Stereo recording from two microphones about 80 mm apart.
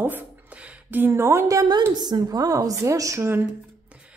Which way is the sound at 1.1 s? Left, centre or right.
Right.